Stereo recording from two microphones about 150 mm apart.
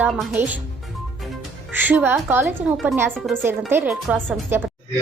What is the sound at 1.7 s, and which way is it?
Speech, 10° right (ahead or behind).